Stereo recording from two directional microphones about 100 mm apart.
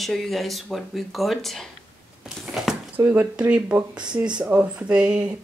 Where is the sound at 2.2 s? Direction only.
Centre (ahead or behind).